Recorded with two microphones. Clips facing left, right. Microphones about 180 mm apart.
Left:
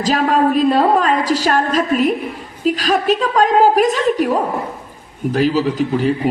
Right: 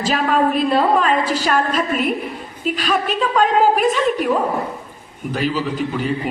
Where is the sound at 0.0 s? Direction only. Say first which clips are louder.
Left 3 dB; 40° left (ahead or behind).